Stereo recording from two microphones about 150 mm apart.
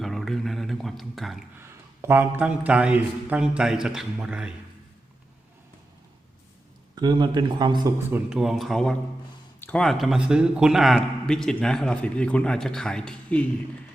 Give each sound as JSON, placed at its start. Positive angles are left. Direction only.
{"t": 0.0, "sound": "a sound", "side_deg": 0}
{"t": 1.6, "sound": "speech", "side_deg": -15}
{"t": 6.9, "sound": "a man's voice", "side_deg": -25}
{"t": 8.1, "sound": "a man's voice", "side_deg": -5}